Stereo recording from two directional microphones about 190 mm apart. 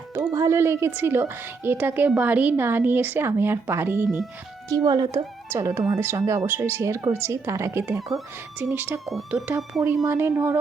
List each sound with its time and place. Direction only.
0.1 s speech: 15° right (ahead or behind)
4.7 s speech: 20° right (ahead or behind)